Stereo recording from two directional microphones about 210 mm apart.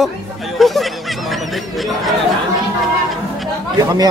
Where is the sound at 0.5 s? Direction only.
Centre (ahead or behind).